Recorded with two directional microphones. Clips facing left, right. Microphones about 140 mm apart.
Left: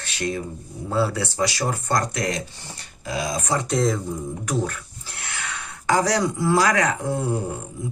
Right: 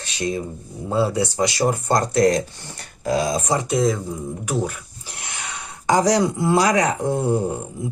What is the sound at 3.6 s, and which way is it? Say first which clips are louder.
Speech: right 2 dB; centre (ahead or behind).